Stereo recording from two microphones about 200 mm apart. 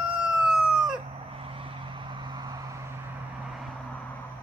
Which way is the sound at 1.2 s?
30° right (ahead or behind).